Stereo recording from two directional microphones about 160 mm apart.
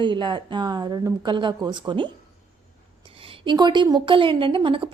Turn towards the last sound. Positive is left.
turn(degrees=-30)  # may be behind; listen again after turning